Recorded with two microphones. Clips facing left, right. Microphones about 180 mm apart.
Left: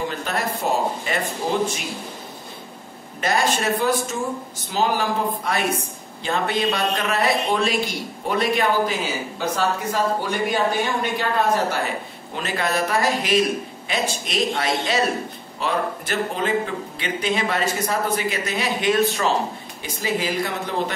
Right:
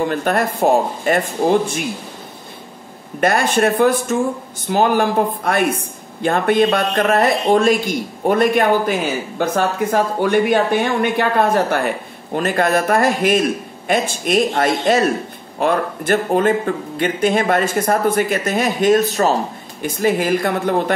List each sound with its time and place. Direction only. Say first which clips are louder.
0.0 s speech: right 8 dB; 55° right (ahead or behind)
3.2 s speech: right 6 dB; 55° right (ahead or behind)
19.8 s speech: right 8 dB; 55° right (ahead or behind)